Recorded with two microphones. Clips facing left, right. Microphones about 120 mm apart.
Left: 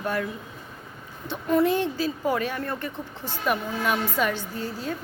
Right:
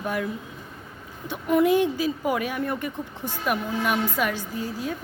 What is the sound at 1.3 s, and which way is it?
A woman's voice, 15° right (ahead or behind).